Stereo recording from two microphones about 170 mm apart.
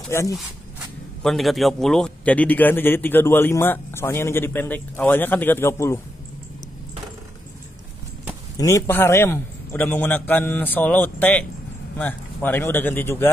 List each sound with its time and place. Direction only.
0.1 s a man's voice: 15° left (ahead or behind)
1.2 s a man's voice: centre (ahead or behind); by 5.9 s 15° left (ahead or behind)
8.5 s a man's voice: 20° left (ahead or behind)